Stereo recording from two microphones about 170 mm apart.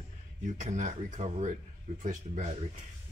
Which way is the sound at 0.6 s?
45° right (ahead or behind).